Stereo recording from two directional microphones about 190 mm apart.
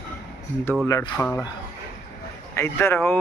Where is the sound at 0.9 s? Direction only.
15° left (ahead or behind).